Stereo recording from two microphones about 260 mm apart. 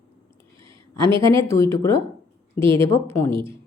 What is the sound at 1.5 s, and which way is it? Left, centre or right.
Speech, centre.